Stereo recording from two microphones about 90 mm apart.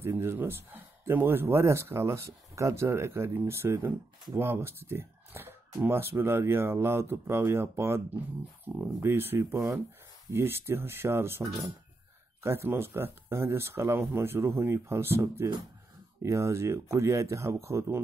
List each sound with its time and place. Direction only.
0.0 s speech: 30° right (ahead or behind)
8.6 s speech: 15° right (ahead or behind)
9.0 s speech: 25° right (ahead or behind)
12.4 s speech: 30° right (ahead or behind)